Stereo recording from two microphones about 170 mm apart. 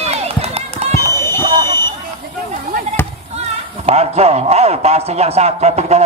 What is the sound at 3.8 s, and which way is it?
Speech, 40° right (ahead or behind).